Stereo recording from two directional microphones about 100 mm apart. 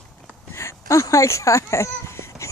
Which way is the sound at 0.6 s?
30° left (ahead or behind).